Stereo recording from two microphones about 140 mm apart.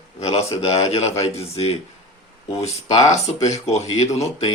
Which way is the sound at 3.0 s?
55° left (ahead or behind).